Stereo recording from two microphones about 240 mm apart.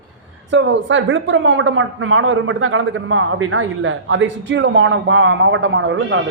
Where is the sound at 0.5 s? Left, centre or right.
Right.